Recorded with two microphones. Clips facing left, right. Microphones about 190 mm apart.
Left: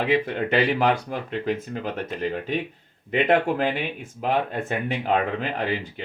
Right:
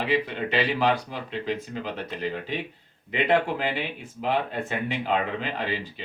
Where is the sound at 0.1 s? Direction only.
50° left (ahead or behind).